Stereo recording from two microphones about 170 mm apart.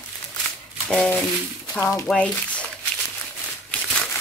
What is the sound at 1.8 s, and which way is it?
Speech, 20° left (ahead or behind).